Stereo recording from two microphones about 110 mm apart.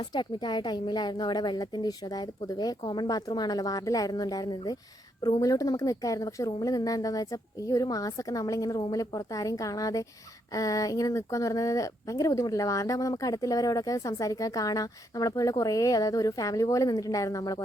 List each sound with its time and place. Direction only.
0.1 s speech: 40° left (ahead or behind)